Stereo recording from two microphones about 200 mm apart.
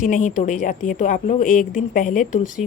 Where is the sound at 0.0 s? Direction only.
40° left (ahead or behind).